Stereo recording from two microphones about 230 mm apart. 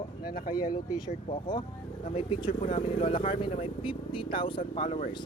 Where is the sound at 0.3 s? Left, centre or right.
Left.